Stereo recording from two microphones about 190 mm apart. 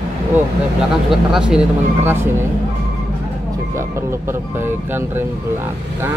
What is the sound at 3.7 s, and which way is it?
Speech, 15° right (ahead or behind).